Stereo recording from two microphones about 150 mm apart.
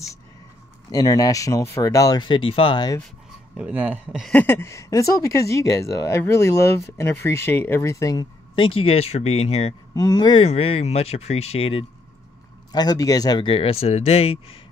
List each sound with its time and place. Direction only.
0.9 s speech: 25° left (ahead or behind)
3.5 s speech: 10° right (ahead or behind)
4.3 s speech: 15° left (ahead or behind)
8.5 s speech: 40° left (ahead or behind)
9.9 s speech: 25° left (ahead or behind)
10.4 s speech: 40° left (ahead or behind)
12.7 s speech: 25° left (ahead or behind)